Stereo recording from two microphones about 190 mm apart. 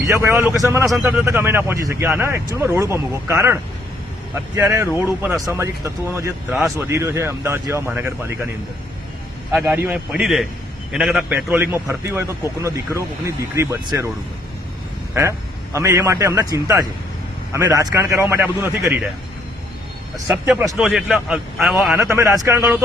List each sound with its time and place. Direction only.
0.0 s speech: 15° right (ahead or behind)
9.5 s speech: 10° right (ahead or behind)
15.1 s speech: 15° right (ahead or behind)
20.1 s a man's voice: 15° right (ahead or behind)